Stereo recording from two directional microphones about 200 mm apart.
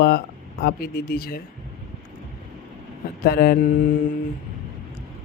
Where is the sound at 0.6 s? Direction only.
50° left (ahead or behind).